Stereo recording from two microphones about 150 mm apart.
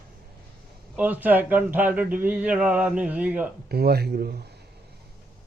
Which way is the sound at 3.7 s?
90° right.